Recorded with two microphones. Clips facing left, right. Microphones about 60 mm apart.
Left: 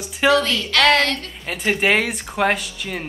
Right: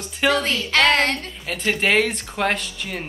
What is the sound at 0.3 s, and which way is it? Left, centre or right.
Speech, right.